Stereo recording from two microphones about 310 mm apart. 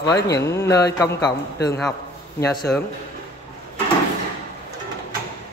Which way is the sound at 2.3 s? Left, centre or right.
Centre.